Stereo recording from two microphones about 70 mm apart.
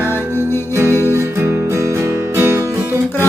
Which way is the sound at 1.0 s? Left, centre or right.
Right.